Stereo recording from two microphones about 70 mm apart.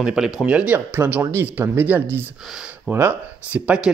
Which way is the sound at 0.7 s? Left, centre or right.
Right.